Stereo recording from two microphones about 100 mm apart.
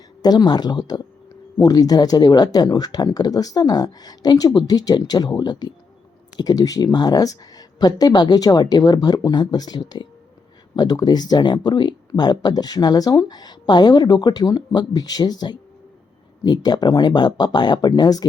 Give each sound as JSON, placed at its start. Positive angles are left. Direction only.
{"t": 0.2, "sound": "speech", "side_deg": 40}